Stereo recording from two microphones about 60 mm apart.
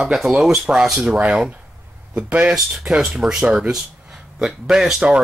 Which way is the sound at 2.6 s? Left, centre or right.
Centre.